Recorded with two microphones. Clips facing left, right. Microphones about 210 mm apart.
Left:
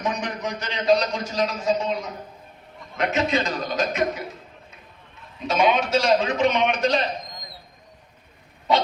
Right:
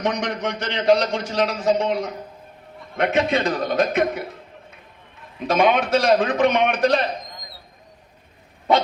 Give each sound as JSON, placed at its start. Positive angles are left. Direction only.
{"t": 0.0, "sound": "a man's voice", "side_deg": -80}
{"t": 2.9, "sound": "a man's voice", "side_deg": -55}
{"t": 5.5, "sound": "a man's voice", "side_deg": -55}